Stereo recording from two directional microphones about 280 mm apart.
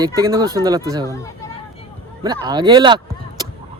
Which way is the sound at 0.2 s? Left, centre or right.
Centre.